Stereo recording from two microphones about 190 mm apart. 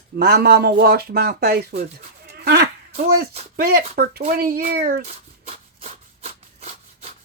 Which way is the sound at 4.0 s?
50° right (ahead or behind).